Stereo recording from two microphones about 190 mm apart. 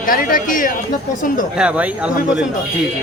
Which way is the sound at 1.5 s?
5° right (ahead or behind).